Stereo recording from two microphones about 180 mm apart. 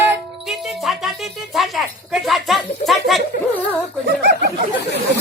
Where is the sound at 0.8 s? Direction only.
Centre (ahead or behind).